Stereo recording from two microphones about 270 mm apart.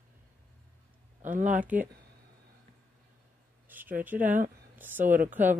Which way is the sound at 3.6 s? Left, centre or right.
Centre.